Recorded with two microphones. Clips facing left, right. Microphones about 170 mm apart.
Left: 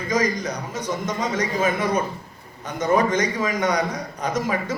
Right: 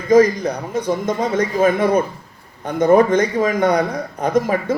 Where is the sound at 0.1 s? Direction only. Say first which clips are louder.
Right 11 dB; 55° right (ahead or behind).